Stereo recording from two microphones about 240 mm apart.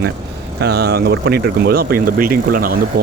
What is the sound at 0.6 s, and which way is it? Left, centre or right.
Speech, right.